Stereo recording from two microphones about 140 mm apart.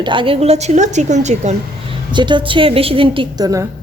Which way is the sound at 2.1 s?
35° right (ahead or behind).